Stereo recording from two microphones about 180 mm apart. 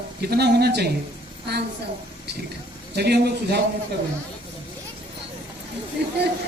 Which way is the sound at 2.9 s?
65° right (ahead or behind).